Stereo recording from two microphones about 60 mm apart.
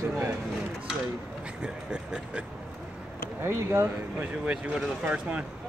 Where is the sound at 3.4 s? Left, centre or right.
Right.